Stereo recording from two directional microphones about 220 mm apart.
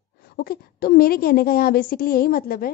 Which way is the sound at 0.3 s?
45° left (ahead or behind).